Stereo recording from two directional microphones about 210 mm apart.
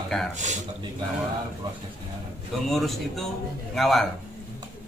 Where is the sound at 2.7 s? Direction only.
Centre (ahead or behind).